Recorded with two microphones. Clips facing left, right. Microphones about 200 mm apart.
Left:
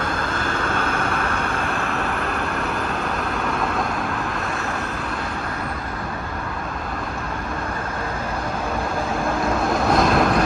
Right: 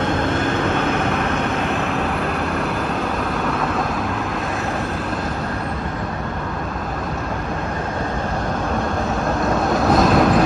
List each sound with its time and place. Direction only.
0.0 s vehicle: 25° right (ahead or behind)
9.8 s vehicle: centre (ahead or behind)